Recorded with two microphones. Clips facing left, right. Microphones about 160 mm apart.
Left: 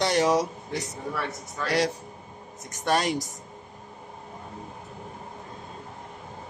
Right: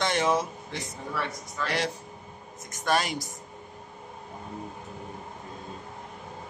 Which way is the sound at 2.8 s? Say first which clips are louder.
Left 2 dB; 35° left (ahead or behind).